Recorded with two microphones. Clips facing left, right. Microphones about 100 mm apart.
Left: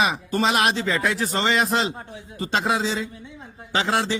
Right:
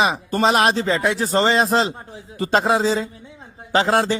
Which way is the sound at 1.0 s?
20° right (ahead or behind).